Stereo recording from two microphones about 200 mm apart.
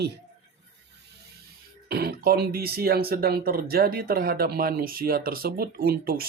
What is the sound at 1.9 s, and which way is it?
Speech, 50° right (ahead or behind).